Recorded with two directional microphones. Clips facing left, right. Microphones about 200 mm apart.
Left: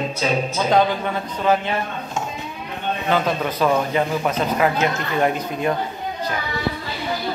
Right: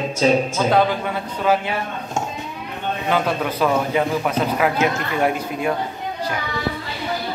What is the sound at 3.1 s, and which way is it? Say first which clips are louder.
Speech: even; 10° right (ahead or behind).